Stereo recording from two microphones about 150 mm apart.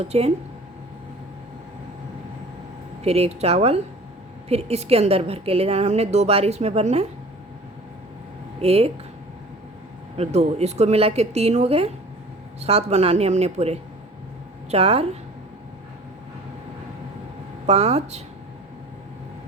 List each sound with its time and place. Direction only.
0.0 s a woman's voice: 40° right (ahead or behind)
3.0 s a woman's voice: 45° right (ahead or behind)
8.6 s a woman's voice: 40° right (ahead or behind)
10.2 s a woman's voice: 45° right (ahead or behind)
17.7 s a woman's voice: 45° right (ahead or behind)